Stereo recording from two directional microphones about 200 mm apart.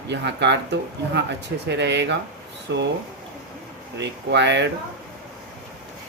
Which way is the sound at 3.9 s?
60° right (ahead or behind).